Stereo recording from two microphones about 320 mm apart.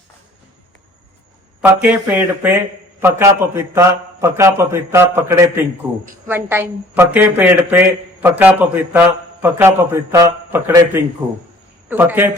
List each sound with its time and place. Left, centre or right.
1.8 s a woman's voice: centre